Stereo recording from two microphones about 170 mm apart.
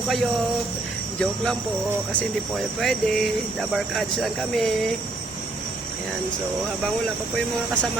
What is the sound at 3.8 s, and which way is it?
Speech, centre (ahead or behind).